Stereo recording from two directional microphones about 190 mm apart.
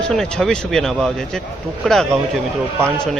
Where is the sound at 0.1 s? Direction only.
5° left (ahead or behind).